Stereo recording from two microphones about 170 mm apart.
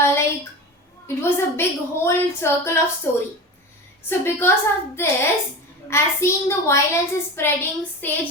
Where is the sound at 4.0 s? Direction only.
15° left (ahead or behind).